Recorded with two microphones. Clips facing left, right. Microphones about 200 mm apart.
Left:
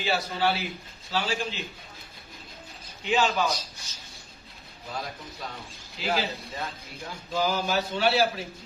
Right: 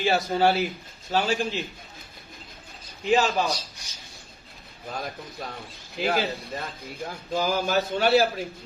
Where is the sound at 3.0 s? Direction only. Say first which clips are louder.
Right 3 dB; 40° right (ahead or behind).